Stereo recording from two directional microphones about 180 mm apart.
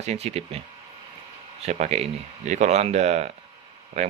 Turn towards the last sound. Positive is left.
turn(degrees=-35)  # may be behind; listen again after turning